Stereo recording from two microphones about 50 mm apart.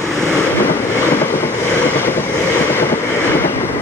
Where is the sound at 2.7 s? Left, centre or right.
Left.